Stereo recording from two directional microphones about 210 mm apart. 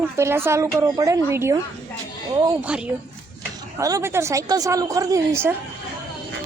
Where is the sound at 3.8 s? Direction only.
15° right (ahead or behind).